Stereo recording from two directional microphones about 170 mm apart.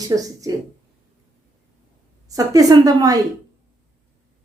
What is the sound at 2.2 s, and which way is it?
Speech, 20° right (ahead or behind).